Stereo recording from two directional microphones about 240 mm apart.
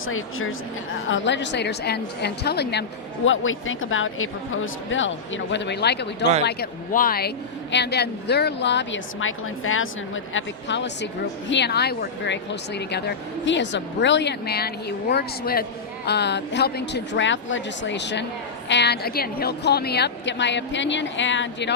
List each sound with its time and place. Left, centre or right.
0.0 s speech: left
3.2 s speech: left